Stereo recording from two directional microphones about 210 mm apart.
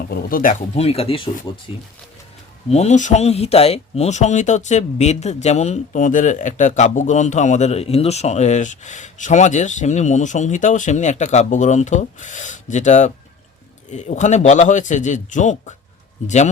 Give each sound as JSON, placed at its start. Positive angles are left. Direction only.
{"t": 0.1, "sound": "speech", "side_deg": 40}
{"t": 0.7, "sound": "speech", "side_deg": 30}
{"t": 2.6, "sound": "speech", "side_deg": 30}